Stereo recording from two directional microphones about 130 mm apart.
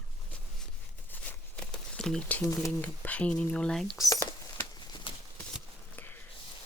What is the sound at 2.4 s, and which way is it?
Speech, 25° left (ahead or behind).